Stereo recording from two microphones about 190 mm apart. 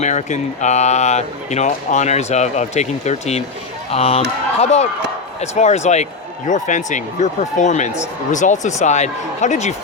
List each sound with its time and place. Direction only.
0.0 s speech: 40° left (ahead or behind)